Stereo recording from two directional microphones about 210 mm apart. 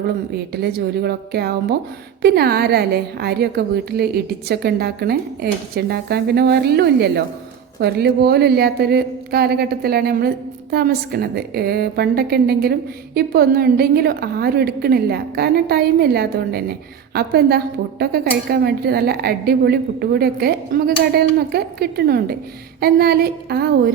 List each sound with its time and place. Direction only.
0.3 s a woman's voice: 50° right (ahead or behind)